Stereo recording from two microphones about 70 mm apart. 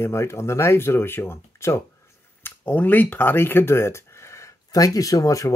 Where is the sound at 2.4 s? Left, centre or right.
Left.